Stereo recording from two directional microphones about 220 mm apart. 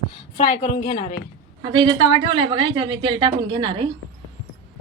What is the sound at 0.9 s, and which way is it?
Speech, 20° left (ahead or behind).